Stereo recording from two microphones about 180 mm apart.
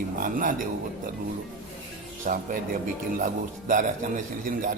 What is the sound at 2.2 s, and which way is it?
A man's voice, 45° right (ahead or behind).